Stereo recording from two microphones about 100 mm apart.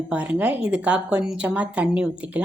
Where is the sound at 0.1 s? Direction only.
15° right (ahead or behind).